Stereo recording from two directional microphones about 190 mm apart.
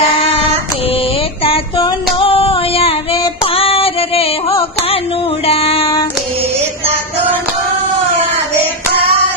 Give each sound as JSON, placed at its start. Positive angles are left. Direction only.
{"t": 1.5, "sound": "female singing", "side_deg": 30}
{"t": 5.5, "sound": "child singing", "side_deg": 30}